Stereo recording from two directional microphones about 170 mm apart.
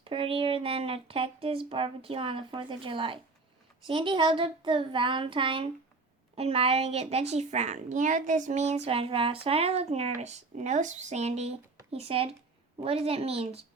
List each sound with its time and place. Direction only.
0.0 s a woman's voice: 30° right (ahead or behind)